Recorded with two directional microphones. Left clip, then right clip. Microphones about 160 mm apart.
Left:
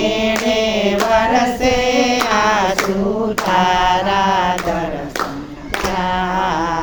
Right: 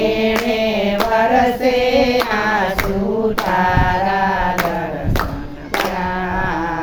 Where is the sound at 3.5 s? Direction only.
Centre (ahead or behind).